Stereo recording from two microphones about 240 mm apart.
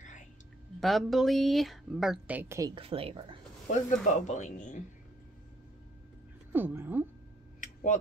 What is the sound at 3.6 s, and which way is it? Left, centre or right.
Speech, left.